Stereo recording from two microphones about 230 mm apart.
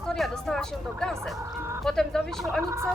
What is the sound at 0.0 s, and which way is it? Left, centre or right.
Speech, centre.